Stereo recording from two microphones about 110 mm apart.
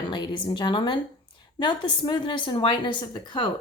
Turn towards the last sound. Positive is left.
turn(degrees=45)  # may be behind; listen again after turning